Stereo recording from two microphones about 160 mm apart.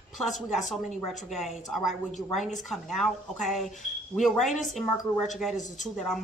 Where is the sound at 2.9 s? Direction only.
Centre (ahead or behind).